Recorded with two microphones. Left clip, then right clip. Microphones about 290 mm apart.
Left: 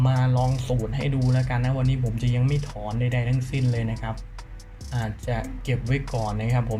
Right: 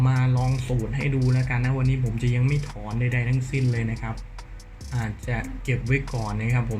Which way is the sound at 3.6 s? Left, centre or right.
Centre.